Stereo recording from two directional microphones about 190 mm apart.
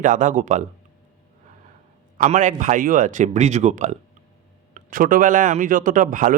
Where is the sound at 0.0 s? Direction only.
40° right (ahead or behind).